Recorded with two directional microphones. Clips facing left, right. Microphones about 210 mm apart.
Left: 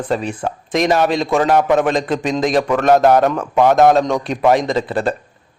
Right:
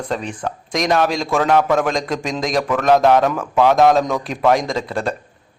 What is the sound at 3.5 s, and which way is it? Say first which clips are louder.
Speech: left 1 dB; 15° left (ahead or behind).